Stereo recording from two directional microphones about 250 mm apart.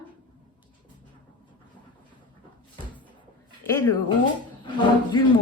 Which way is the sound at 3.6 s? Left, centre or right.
Centre.